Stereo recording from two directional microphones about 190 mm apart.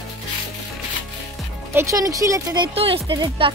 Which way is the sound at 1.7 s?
15° right (ahead or behind).